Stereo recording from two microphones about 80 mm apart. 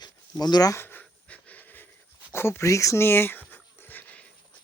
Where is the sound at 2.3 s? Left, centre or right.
Left.